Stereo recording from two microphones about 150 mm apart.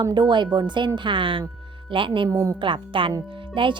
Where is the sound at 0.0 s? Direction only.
30° right (ahead or behind).